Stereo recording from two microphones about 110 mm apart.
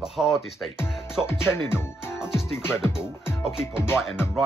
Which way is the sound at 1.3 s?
20° left (ahead or behind).